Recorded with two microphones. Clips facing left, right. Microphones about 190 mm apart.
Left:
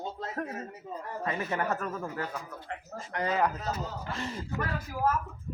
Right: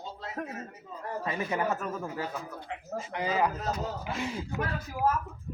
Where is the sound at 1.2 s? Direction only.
10° right (ahead or behind).